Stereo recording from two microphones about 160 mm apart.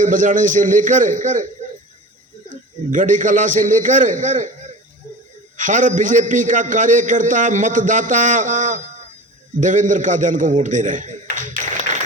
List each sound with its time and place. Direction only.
0.0 s a man's voice: 55° right (ahead or behind)
2.5 s a man's voice: 55° right (ahead or behind)
5.5 s a man's voice: 55° right (ahead or behind)